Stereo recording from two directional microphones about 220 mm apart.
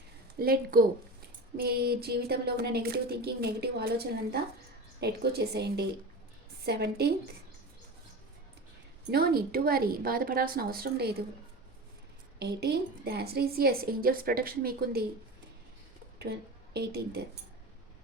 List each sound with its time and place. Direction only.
0.3 s a woman's voice: 45° right (ahead or behind)
9.0 s a woman's voice: 45° right (ahead or behind)
12.4 s a woman's voice: 50° right (ahead or behind)
16.1 s speech: 50° right (ahead or behind)